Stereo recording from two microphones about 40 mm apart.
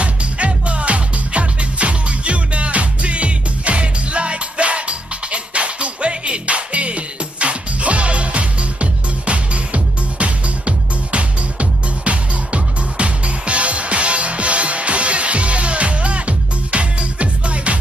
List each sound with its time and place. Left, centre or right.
0.0 s music: right